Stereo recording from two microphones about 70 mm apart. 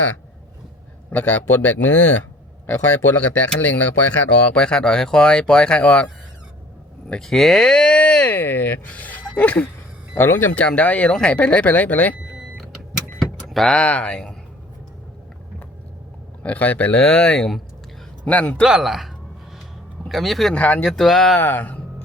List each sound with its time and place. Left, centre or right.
1.1 s speech: left
4.5 s speech: centre
7.1 s speech: centre; by 12.1 s left
13.1 s vehicle: centre
13.7 s speech: centre
16.4 s speech: left
18.7 s speech: centre
20.5 s speech: centre
20.8 s speech: centre
21.3 s speech: left